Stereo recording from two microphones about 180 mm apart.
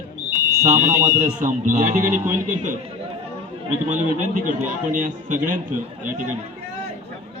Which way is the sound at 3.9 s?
45° right (ahead or behind).